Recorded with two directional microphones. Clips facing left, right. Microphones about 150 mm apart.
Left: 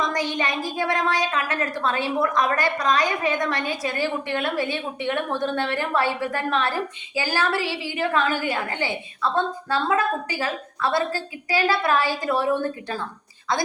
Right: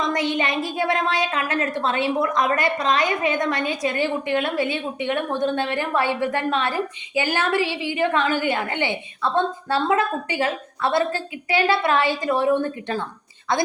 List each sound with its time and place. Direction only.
0.1 s speech: 25° right (ahead or behind)